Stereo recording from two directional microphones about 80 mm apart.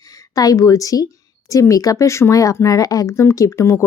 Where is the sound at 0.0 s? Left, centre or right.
Left.